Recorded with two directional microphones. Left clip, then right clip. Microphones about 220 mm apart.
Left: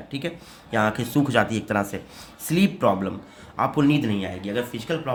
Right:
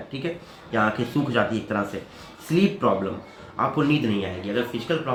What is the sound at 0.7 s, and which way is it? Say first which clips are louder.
Speech: even; 50° left (ahead or behind).